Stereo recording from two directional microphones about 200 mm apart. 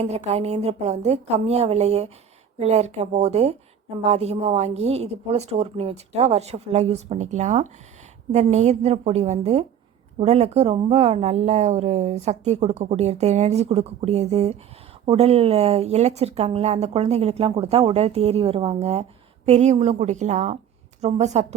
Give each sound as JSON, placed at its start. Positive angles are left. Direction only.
{"t": 0.0, "sound": "speech", "side_deg": -35}